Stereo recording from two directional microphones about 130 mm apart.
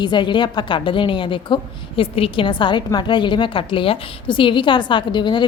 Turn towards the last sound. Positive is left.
turn(degrees=35)  # may be behind; listen again after turning